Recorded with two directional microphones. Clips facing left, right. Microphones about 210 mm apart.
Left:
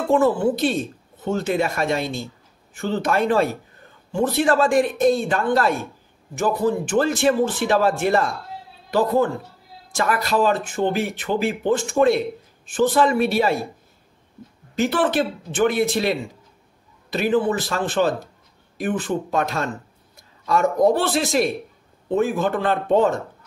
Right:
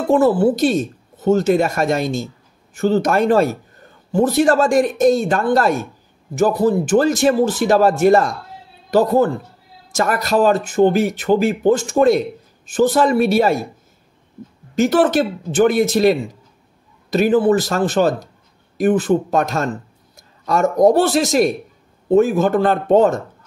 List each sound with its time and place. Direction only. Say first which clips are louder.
0.1 s a man's voice: right 4 dB; 40° right (ahead or behind)
14.8 s a man's voice: right 5 dB; 40° right (ahead or behind)